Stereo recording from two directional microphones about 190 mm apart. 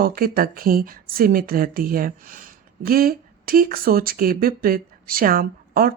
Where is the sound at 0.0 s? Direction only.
50° right (ahead or behind).